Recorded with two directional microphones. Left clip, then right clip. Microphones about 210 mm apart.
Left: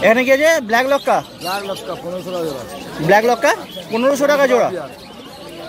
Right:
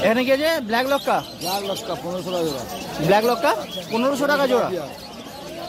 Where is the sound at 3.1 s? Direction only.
5° left (ahead or behind).